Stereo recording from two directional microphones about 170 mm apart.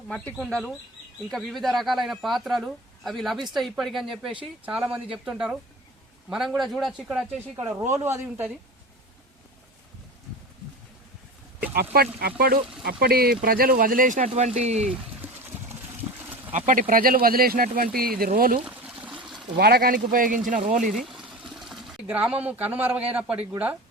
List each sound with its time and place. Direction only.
0.1 s speech: 5° left (ahead or behind)
6.6 s speech: centre (ahead or behind)
7.5 s a man's voice: 15° right (ahead or behind)
11.7 s speech: 65° right (ahead or behind); by 14.8 s 40° right (ahead or behind)
15.2 s engine: 10° right (ahead or behind)
16.5 s speech: 50° right (ahead or behind)
18.6 s trickle: 5° right (ahead or behind)
19.5 s speech: 70° right (ahead or behind); by 20.8 s 50° right (ahead or behind)
20.8 s sewing machine: centre (ahead or behind)
22.4 s a man's voice: 10° right (ahead or behind)